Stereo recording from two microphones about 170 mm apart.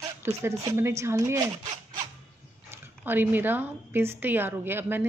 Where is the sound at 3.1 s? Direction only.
10° right (ahead or behind).